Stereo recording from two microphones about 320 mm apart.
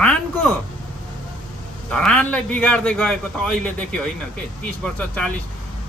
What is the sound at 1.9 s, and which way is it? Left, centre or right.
Speech, centre.